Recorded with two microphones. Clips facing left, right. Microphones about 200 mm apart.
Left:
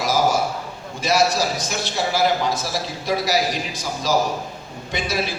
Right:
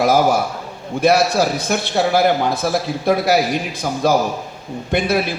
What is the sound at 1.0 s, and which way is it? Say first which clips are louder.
A man's voice: right 5 dB; 60° right (ahead or behind).